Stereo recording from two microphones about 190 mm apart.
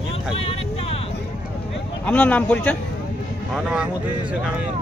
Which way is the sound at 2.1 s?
5° left (ahead or behind).